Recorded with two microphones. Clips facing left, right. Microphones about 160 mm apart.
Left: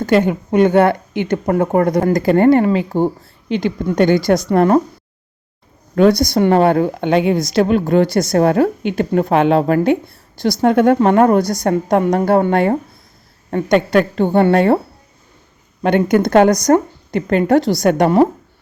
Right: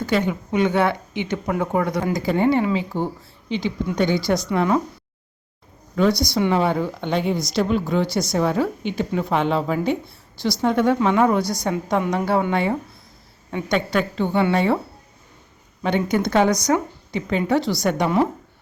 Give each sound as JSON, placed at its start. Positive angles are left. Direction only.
{"t": 0.0, "sound": "speech", "side_deg": 50}
{"t": 5.9, "sound": "a woman's voice", "side_deg": 55}
{"t": 15.8, "sound": "speech", "side_deg": 55}